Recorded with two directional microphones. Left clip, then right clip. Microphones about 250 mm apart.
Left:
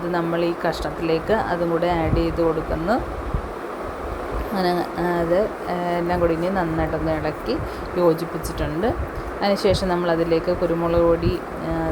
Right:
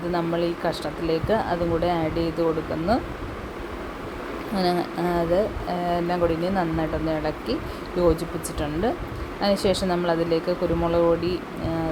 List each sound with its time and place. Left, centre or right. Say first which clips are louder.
0.1 s speech: left 2 dB; centre
4.5 s speech: left 2 dB; centre
9.4 s speech: left 2 dB; centre